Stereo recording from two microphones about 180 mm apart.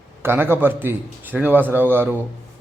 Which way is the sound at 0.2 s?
10° right (ahead or behind).